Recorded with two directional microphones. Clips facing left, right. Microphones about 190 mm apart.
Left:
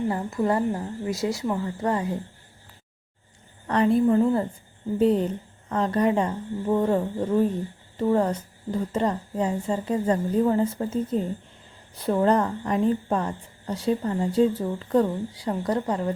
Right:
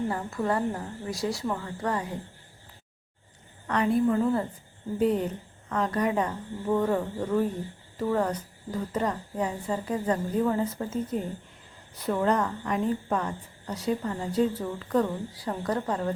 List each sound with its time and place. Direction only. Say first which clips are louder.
0.1 s a woman's voice: left 4 dB; 20° left (ahead or behind)
3.7 s a woman's voice: left 4 dB; 30° left (ahead or behind)